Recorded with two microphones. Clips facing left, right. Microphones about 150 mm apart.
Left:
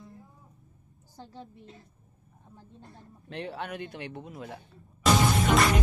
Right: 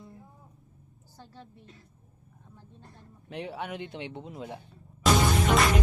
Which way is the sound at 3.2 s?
15° right (ahead or behind).